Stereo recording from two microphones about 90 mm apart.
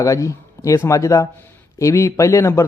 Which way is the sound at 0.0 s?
35° left (ahead or behind).